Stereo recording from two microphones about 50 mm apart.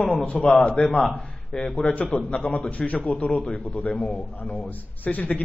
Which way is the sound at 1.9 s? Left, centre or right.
Left.